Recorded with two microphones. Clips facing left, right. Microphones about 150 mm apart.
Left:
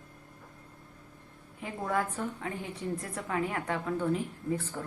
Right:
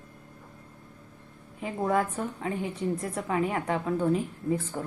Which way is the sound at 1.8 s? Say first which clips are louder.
Right 5 dB; 25° right (ahead or behind).